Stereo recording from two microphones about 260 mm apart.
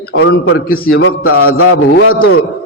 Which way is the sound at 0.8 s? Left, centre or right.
Left.